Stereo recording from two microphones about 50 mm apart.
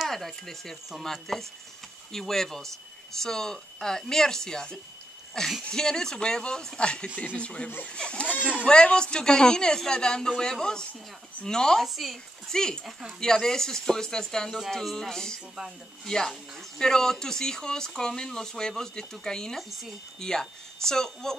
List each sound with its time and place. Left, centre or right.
0.1 s speech: centre; by 8.3 s left
8.3 s a sound: right
8.6 s speech: centre
11.8 s speech: centre
12.5 s speech: centre